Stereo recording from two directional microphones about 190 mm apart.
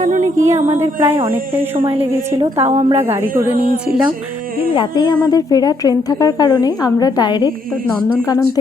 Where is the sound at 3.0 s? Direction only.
10° right (ahead or behind).